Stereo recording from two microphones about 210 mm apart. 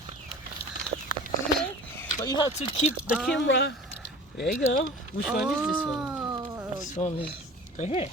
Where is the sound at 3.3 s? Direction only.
60° left (ahead or behind).